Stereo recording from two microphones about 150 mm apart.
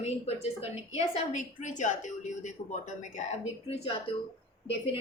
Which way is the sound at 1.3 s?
55° left (ahead or behind).